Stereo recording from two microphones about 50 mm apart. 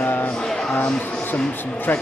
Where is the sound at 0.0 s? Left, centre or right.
Left.